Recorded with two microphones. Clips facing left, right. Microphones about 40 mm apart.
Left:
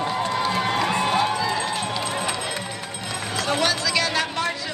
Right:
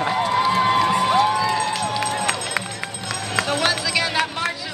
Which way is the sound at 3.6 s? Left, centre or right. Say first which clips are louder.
Right 1 dB; centre.